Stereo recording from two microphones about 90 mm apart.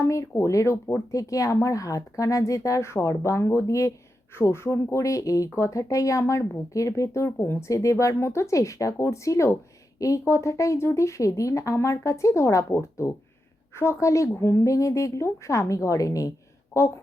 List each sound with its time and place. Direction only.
0.0 s speech: 35° left (ahead or behind)